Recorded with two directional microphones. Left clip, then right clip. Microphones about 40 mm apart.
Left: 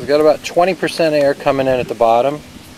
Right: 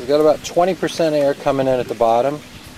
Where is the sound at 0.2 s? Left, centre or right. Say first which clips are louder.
Left 3 dB; centre.